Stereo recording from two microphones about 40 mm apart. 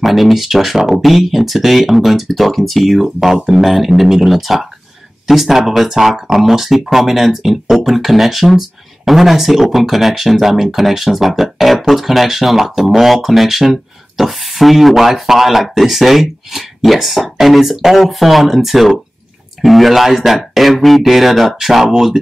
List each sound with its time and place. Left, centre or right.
0.0 s speech: centre